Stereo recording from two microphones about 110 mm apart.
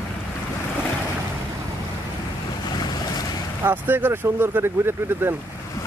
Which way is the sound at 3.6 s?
15° right (ahead or behind).